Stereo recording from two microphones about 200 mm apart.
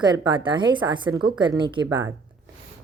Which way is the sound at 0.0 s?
25° right (ahead or behind).